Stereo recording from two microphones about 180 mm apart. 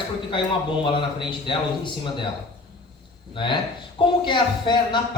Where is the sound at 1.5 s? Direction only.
25° left (ahead or behind).